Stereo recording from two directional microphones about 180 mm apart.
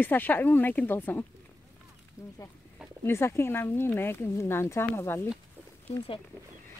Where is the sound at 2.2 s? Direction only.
15° left (ahead or behind).